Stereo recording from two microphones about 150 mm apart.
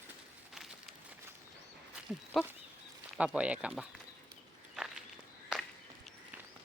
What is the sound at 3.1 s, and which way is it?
Speech, 10° right (ahead or behind).